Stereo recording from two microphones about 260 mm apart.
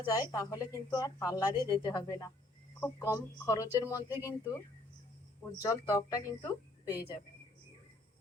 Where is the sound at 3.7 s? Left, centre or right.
Centre.